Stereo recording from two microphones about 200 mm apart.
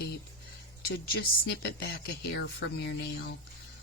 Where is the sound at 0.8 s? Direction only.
50° left (ahead or behind).